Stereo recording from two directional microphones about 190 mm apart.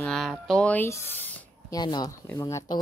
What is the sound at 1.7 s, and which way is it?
Speech, 20° left (ahead or behind).